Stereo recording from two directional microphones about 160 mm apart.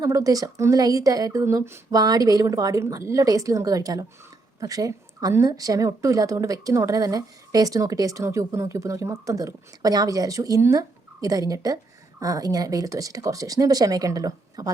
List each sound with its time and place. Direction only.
0.0 s speech: 20° right (ahead or behind)